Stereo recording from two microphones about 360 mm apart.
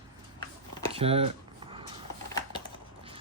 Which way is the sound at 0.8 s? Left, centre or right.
Centre.